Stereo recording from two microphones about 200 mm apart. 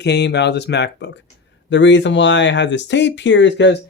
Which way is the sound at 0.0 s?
60° left (ahead or behind).